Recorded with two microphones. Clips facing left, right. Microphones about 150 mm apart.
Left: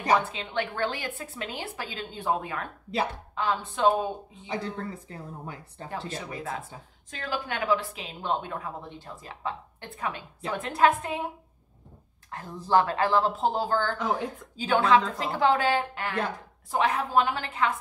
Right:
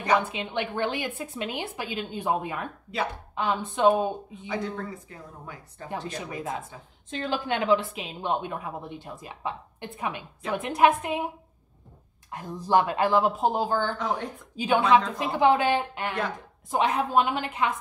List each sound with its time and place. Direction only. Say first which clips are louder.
0.2 s a woman's voice: right 1 dB; 15° right (ahead or behind)
5.1 s speech: left 3 dB; 30° left (ahead or behind)
5.9 s a woman's voice: right 2 dB; 15° right (ahead or behind)
12.3 s a woman's voice: right 1 dB; 15° right (ahead or behind)
13.9 s speech: left 1 dB; 5° left (ahead or behind)
14.6 s a woman's voice: right 1 dB; 15° right (ahead or behind)